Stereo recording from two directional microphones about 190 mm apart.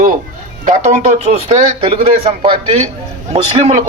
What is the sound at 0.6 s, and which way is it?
Speech, 40° right (ahead or behind).